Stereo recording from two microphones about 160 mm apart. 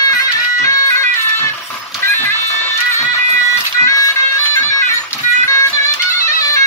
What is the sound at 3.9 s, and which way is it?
Music, 20° left (ahead or behind).